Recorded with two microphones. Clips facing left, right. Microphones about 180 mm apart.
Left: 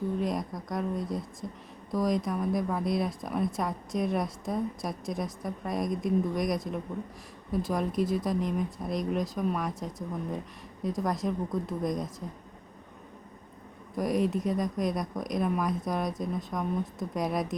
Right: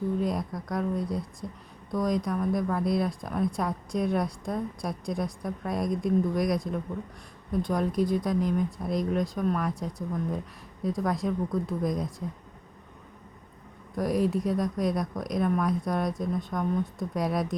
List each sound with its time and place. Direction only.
0.2 s speech: centre (ahead or behind)
13.9 s speech: centre (ahead or behind)